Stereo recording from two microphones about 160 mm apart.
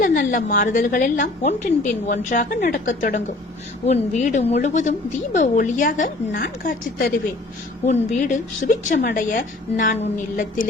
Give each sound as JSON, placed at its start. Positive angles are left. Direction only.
{"t": 0.0, "sound": "a woman's voice", "side_deg": 60}
{"t": 6.3, "sound": "speech", "side_deg": 75}
{"t": 7.9, "sound": "a woman's voice", "side_deg": 50}